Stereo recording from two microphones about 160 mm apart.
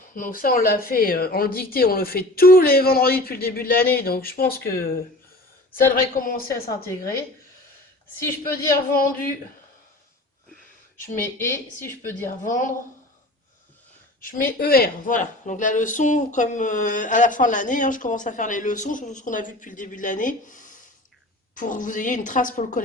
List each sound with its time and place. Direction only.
0.1 s a woman's voice: 60° left (ahead or behind)
6.7 s a woman's voice: 20° left (ahead or behind)
8.7 s a woman's voice: 65° left (ahead or behind)
11.2 s speech: 15° left (ahead or behind)
14.2 s a woman's voice: 60° left (ahead or behind)